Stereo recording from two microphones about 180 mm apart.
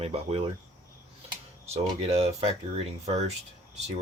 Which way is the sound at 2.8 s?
35° right (ahead or behind).